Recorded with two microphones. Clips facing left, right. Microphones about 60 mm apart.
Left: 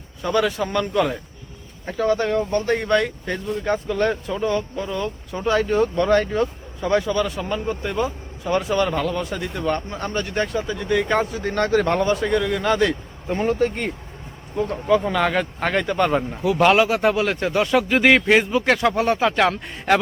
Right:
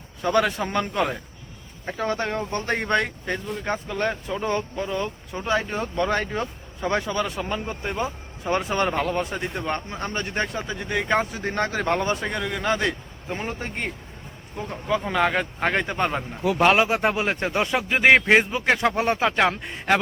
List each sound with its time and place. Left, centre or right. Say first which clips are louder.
0.3 s a man's voice: left 2 dB; right; by 4.2 s centre
4.4 s a man's voice: left 3 dB; right
4.9 s a man's voice: left 2 dB; right
6.1 s a man's voice: left 7 dB; right
8.5 s a man's voice: left 3 dB; right
11.3 s a man's voice: left 3 dB; right
11.5 s speech: left 5 dB; centre
12.0 s a man's voice: left 6 dB; right
12.4 s a man's voice: left 5 dB; centre
19.5 s speech: left 3 dB; centre